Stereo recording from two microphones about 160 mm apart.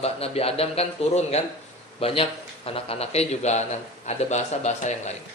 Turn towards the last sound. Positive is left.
turn(degrees=45)  # may be behind; listen again after turning